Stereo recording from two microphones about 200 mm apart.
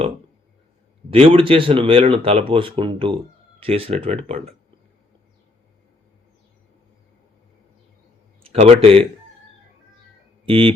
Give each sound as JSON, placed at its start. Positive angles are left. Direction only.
{"t": 1.1, "sound": "speech", "side_deg": -30}
{"t": 8.4, "sound": "speech", "side_deg": -30}
{"t": 10.4, "sound": "speech", "side_deg": -25}